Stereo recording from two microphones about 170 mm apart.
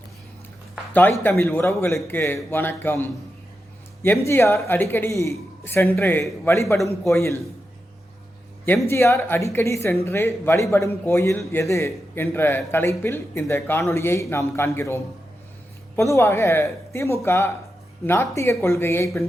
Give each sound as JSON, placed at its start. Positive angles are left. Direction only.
{"t": 1.2, "sound": "speech", "side_deg": 15}
{"t": 8.6, "sound": "speech", "side_deg": 15}